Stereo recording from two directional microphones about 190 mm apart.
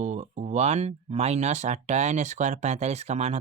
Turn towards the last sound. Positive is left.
turn(degrees=-35)  # may be behind; listen again after turning